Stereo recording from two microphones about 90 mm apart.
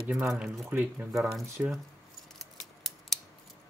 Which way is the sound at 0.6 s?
20° right (ahead or behind).